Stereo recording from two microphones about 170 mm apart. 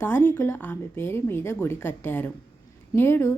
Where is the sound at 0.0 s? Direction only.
10° left (ahead or behind).